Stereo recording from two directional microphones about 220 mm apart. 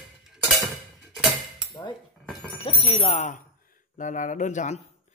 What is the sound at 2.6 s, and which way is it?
Speech, 25° left (ahead or behind).